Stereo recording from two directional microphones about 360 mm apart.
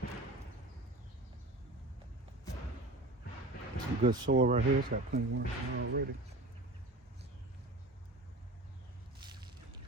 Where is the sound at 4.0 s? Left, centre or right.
Right.